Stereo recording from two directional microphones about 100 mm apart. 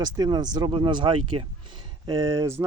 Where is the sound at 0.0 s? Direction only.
45° right (ahead or behind).